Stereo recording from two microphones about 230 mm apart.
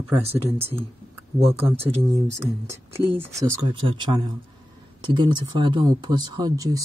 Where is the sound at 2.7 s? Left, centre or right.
Centre.